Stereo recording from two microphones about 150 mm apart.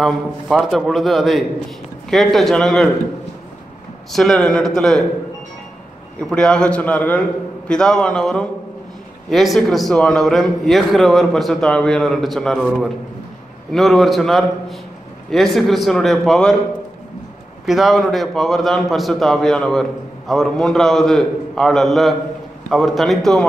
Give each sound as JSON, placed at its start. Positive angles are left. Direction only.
{"t": 0.7, "sound": "a man's voice", "side_deg": 0}
{"t": 4.1, "sound": "a man's voice", "side_deg": 0}
{"t": 6.3, "sound": "a man's voice", "side_deg": 5}
{"t": 17.6, "sound": "a man's voice", "side_deg": 0}